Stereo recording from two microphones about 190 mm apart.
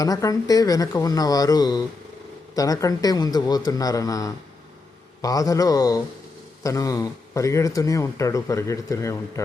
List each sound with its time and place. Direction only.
0.0 s speech: 20° left (ahead or behind)